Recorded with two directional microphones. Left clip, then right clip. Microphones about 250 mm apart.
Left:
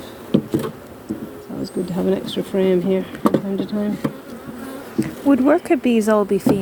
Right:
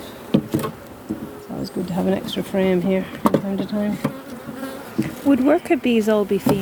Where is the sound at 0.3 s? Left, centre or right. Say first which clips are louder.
Left 1 dB; right.